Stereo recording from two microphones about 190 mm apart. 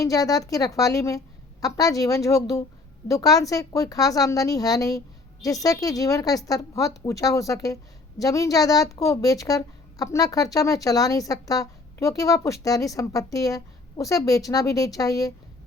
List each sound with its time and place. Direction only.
0.0 s a woman's voice: 20° left (ahead or behind)